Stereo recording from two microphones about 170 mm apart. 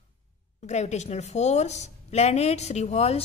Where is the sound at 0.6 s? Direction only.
40° left (ahead or behind).